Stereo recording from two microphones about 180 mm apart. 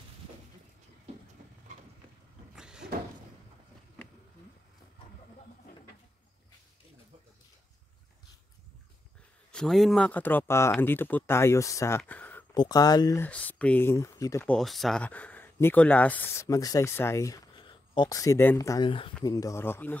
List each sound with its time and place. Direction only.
2.5 s cupboard open or close: 5° right (ahead or behind)
9.5 s speech: 5° left (ahead or behind)
12.0 s a sound: 10° left (ahead or behind)
12.5 s speech: 20° left (ahead or behind)
13.3 s speech: 5° left (ahead or behind)
14.4 s speech: 5° left (ahead or behind)
18.9 s speech: 30° left (ahead or behind)
19.2 s speech: 20° left (ahead or behind)